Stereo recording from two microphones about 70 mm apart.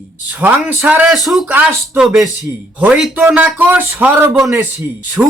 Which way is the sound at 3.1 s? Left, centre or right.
Right.